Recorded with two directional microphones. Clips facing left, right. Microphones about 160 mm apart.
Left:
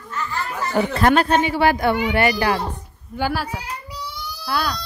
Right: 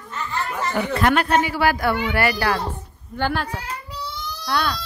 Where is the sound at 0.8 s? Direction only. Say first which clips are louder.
Left 3 dB; 35° left (ahead or behind).